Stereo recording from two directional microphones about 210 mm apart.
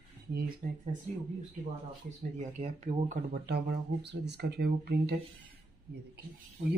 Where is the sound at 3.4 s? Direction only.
55° right (ahead or behind).